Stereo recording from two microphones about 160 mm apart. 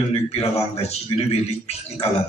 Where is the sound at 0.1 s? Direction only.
40° left (ahead or behind).